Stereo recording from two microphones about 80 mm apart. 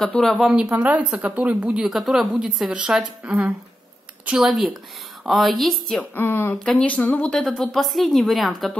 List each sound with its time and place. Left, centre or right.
0.0 s a woman's voice: centre
0.5 s speech: centre
1.9 s a woman's voice: centre
4.3 s a woman's voice: centre
5.9 s speech: left
6.5 s speech: centre
7.2 s a woman's voice: centre